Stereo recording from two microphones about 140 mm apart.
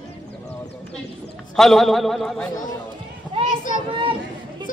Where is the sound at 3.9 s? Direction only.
40° right (ahead or behind).